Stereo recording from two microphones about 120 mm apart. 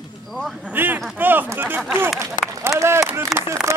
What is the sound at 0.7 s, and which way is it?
A man's voice, 15° right (ahead or behind).